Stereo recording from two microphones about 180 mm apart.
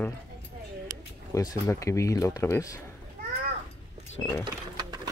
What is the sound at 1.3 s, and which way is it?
Speech, 20° left (ahead or behind).